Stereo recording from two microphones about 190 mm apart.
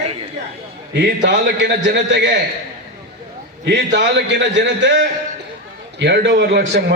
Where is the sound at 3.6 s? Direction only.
60° right (ahead or behind).